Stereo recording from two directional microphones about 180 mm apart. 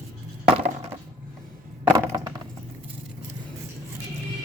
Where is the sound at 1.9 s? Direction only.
15° right (ahead or behind).